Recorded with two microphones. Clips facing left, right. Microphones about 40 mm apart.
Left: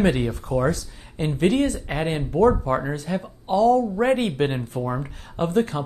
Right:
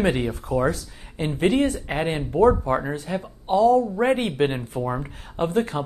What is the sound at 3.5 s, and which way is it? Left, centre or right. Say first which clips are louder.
Speech: right 1 dB; right.